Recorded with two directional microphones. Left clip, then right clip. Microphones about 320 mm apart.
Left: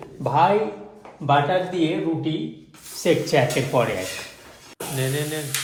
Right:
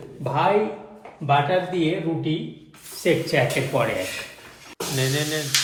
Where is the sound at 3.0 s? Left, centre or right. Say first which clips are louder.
Left 1 dB; centre.